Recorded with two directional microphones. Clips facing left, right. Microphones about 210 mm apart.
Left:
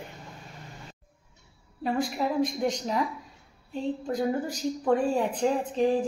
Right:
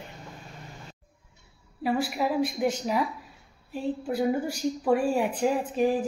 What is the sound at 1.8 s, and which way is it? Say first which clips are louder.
A woman's voice: right 1 dB; 5° right (ahead or behind).